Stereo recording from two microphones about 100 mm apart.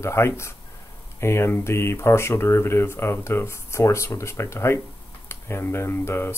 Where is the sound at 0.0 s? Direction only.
25° left (ahead or behind).